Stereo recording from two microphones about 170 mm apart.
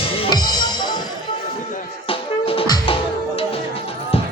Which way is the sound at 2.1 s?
30° left (ahead or behind).